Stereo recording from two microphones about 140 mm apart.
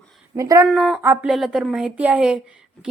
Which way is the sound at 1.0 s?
15° right (ahead or behind).